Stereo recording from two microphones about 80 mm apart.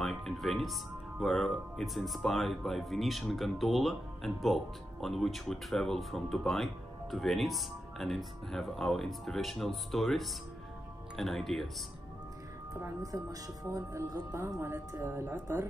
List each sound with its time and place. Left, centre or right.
0.0 s music: centre
1.2 s speech: centre
13.0 s speech: right
15.0 s speech: right
15.3 s speech: right